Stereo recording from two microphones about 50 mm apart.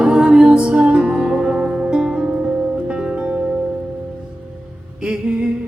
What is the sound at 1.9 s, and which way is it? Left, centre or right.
Music, centre.